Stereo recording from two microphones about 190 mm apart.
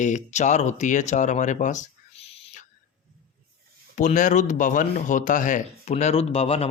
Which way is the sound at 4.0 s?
40° left (ahead or behind).